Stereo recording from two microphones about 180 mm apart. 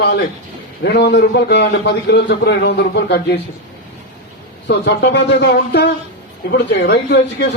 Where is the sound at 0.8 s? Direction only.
70° left (ahead or behind).